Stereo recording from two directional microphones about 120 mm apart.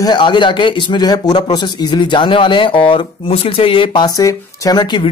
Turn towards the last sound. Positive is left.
turn(degrees=40)  # may be behind; listen again after turning